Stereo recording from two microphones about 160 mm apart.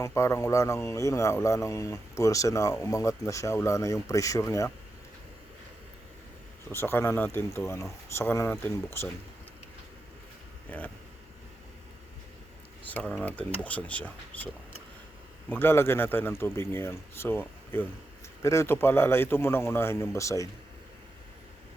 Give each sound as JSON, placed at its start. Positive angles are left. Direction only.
{"t": 0.0, "sound": "speech", "side_deg": 15}
{"t": 6.7, "sound": "speech", "side_deg": 15}
{"t": 10.7, "sound": "speech", "side_deg": 10}
{"t": 12.9, "sound": "speech", "side_deg": 5}